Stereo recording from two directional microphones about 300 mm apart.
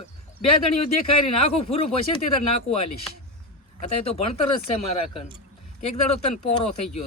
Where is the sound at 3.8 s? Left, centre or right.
Left.